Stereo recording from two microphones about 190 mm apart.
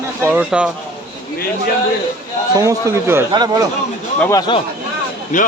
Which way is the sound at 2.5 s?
15° right (ahead or behind).